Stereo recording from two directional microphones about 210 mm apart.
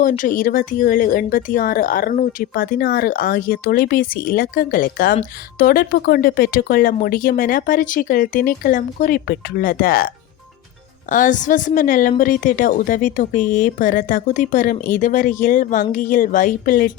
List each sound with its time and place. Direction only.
0.0 s speech: 40° left (ahead or behind)
11.1 s a woman's voice: 40° left (ahead or behind)